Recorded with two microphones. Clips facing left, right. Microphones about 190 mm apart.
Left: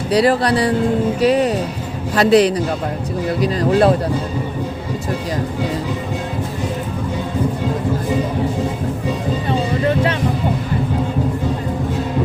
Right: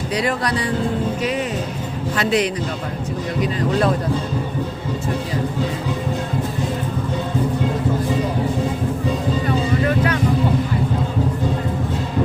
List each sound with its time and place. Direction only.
0.1 s speech: 35° left (ahead or behind)
9.5 s music: 25° left (ahead or behind)